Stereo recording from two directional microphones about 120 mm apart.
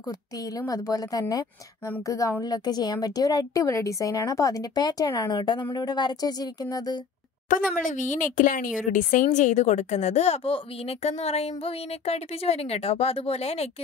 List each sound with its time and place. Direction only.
0.6 s a woman's voice: 30° left (ahead or behind)
7.4 s a woman's voice: 90° left; by 13.7 s 60° left (ahead or behind)